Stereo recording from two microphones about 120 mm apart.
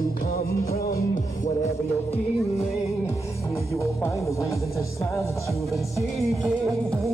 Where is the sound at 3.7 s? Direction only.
25° left (ahead or behind).